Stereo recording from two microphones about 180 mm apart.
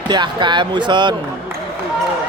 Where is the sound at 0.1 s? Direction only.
25° right (ahead or behind).